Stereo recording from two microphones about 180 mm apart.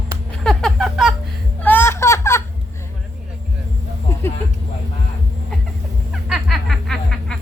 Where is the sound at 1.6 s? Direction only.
10° left (ahead or behind).